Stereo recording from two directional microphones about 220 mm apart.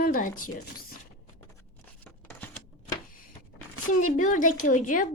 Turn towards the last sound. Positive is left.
turn(degrees=35)  # may be behind; listen again after turning